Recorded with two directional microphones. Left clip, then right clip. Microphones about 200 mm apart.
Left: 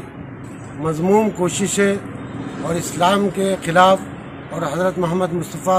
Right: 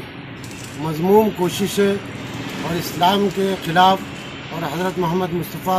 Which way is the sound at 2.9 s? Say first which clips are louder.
Even; 20° left (ahead or behind).